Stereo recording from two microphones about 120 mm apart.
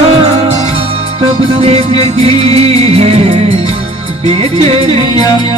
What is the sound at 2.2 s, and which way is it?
Music, 55° right (ahead or behind).